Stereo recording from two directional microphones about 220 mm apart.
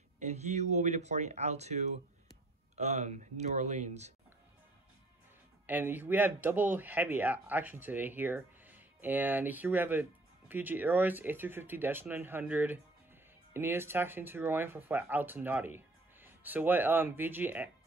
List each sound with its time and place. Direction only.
0.2 s speech: 30° right (ahead or behind)
5.7 s speech: 10° right (ahead or behind)